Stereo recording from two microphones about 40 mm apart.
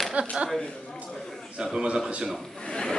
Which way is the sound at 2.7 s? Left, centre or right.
Centre.